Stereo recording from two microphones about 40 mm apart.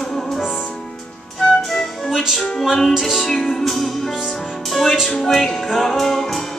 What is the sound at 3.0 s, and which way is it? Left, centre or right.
Music, centre.